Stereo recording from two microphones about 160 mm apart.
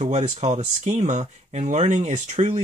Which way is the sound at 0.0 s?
45° right (ahead or behind).